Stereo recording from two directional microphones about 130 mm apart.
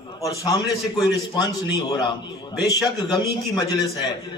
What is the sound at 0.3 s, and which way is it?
A man's voice, 30° left (ahead or behind).